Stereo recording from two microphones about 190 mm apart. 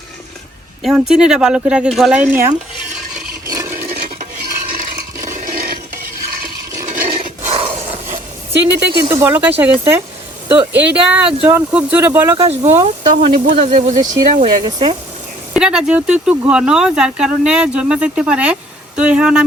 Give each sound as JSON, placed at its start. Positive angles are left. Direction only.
{"t": 0.8, "sound": "speech", "side_deg": 0}
{"t": 3.5, "sound": "a sound", "side_deg": -15}
{"t": 3.9, "sound": "stir", "side_deg": -55}
{"t": 4.7, "sound": "a sound", "side_deg": -45}
{"t": 7.1, "sound": "a sound", "side_deg": -30}
{"t": 9.0, "sound": "speech", "side_deg": -15}
{"t": 12.4, "sound": "speech", "side_deg": -30}
{"t": 14.6, "sound": "speech", "side_deg": -25}
{"t": 15.5, "sound": "speech", "side_deg": -5}